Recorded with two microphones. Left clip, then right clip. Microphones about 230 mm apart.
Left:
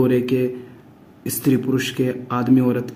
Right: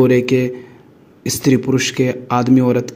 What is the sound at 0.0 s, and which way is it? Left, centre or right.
Speech, right.